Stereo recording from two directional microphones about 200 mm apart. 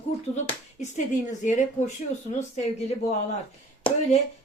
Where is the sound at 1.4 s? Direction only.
35° left (ahead or behind).